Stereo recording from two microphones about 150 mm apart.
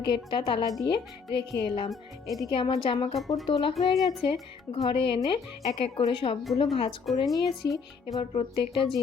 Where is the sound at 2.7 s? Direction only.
40° left (ahead or behind).